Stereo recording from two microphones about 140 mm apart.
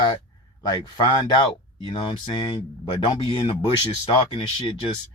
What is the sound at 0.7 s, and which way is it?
Speech, 30° left (ahead or behind).